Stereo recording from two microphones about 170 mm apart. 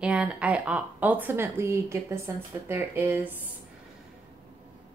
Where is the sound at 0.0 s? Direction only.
5° right (ahead or behind).